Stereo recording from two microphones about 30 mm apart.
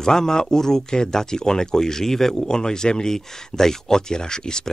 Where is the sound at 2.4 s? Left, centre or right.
Left.